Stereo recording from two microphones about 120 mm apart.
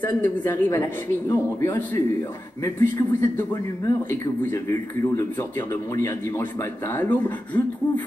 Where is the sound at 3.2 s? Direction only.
20° left (ahead or behind).